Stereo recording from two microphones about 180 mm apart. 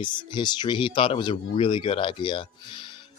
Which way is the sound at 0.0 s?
25° left (ahead or behind).